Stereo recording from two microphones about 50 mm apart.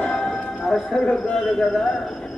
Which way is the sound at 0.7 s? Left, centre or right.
Centre.